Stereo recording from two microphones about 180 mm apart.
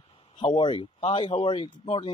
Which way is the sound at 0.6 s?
25° left (ahead or behind).